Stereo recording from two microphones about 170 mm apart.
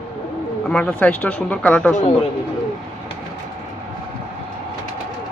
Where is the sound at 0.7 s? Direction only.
5° left (ahead or behind).